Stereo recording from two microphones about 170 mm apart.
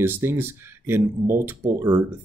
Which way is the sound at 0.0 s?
15° right (ahead or behind).